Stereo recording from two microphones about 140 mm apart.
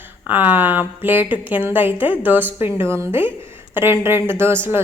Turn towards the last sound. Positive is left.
turn(degrees=-15)  # may be behind; listen again after turning